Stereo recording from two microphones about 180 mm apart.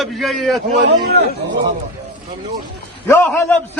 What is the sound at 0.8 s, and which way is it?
Speech, 65° right (ahead or behind).